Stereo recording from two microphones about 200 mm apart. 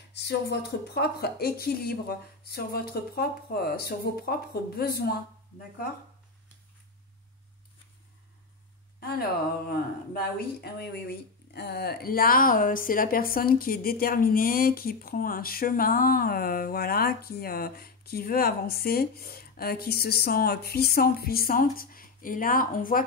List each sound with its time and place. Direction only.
0.1 s speech: 55° left (ahead or behind)
9.7 s speech: 50° left (ahead or behind)